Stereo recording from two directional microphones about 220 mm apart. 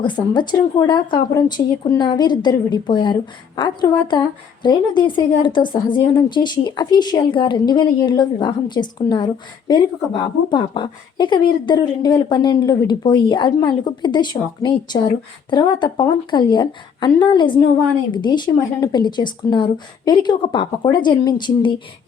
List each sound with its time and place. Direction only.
0.0 s speech: 20° left (ahead or behind)